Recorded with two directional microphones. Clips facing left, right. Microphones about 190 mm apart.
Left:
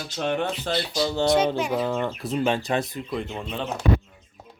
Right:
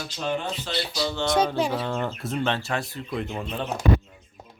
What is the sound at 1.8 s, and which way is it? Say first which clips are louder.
A child's voice: left 3 dB; centre (ahead or behind).